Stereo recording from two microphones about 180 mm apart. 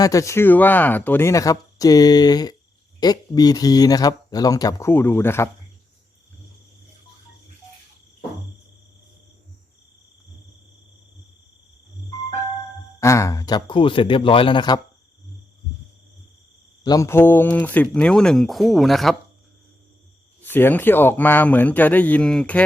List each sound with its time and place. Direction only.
0.0 s speech: 20° left (ahead or behind)
13.0 s speech: 15° left (ahead or behind)
16.8 s speech: 20° left (ahead or behind); by 19.1 s centre (ahead or behind)
20.4 s speech: 10° left (ahead or behind)